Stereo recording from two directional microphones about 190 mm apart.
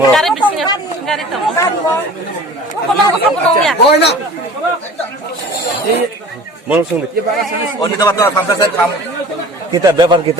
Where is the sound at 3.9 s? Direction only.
60° left (ahead or behind).